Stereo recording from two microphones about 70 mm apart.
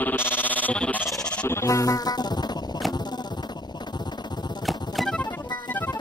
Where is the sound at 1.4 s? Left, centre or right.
Left.